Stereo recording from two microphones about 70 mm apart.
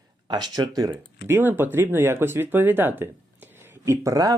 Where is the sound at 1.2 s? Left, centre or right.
Right.